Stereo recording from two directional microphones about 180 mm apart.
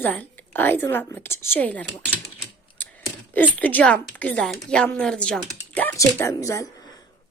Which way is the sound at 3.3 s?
10° left (ahead or behind).